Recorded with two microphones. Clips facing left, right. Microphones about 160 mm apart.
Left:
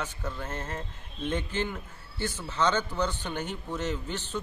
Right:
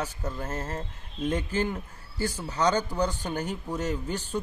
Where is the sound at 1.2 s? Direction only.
40° right (ahead or behind).